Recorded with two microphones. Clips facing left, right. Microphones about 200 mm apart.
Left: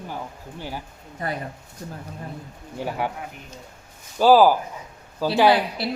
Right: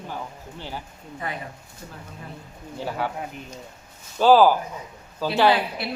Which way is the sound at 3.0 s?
15° left (ahead or behind).